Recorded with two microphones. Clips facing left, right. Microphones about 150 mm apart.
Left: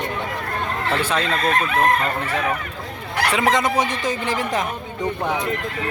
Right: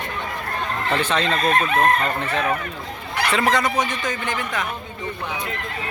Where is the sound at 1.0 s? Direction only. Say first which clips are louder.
Right 1 dB; 10° left (ahead or behind).